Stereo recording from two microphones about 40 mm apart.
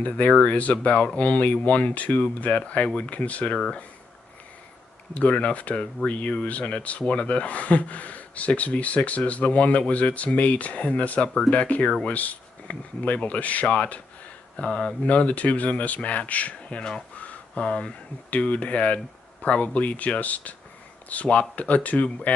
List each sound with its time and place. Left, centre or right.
0.0 s speech: left
5.1 s speech: left
17.2 s a sound: left
18.3 s speech: left